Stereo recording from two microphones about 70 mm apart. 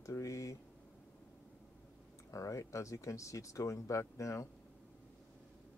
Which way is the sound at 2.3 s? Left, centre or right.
Left.